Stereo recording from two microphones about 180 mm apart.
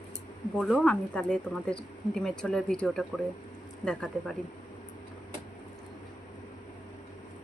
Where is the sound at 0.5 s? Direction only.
5° left (ahead or behind).